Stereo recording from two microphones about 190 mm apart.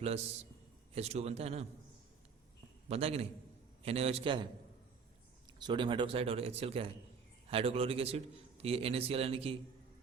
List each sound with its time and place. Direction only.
0.9 s speech: 35° right (ahead or behind)
2.9 s speech: 30° right (ahead or behind)
5.5 s a man's voice: 25° right (ahead or behind)